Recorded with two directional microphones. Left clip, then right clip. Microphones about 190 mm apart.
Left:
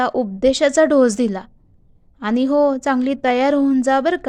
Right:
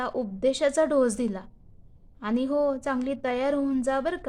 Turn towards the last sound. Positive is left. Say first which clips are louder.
# left 10 dB
turn(degrees=35)  # may be behind; listen again after turning